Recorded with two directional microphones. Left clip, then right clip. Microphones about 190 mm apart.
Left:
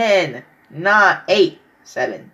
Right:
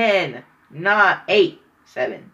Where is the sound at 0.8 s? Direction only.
30° left (ahead or behind).